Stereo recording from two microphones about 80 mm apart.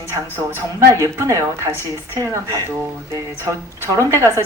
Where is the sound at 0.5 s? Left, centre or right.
Right.